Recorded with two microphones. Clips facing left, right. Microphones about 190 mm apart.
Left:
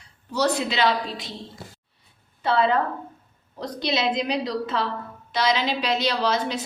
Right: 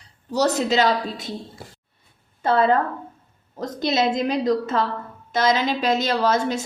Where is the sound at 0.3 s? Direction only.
40° right (ahead or behind).